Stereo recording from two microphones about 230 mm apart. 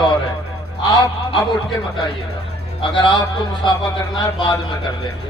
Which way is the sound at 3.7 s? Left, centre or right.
Left.